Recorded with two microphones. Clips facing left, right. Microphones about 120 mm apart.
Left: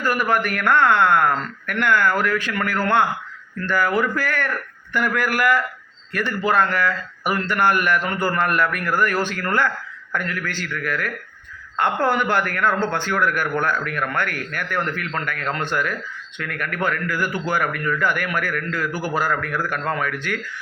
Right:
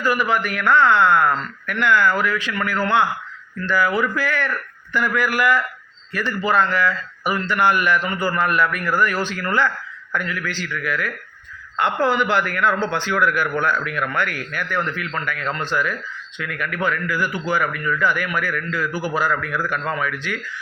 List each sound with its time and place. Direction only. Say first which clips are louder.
0.0 s speech: even; 50° left (ahead or behind)